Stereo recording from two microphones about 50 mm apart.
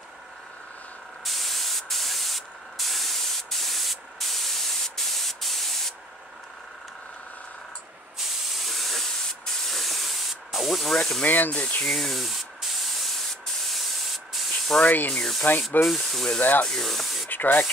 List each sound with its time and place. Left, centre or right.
1.2 s spray: centre
8.2 s hiss: centre
9.7 s spray: centre
11.2 s speech: left
11.8 s spray: centre
14.8 s speech: left
15.1 s speech: centre
16.3 s speech: left
16.6 s speech: centre
17.3 s speech: left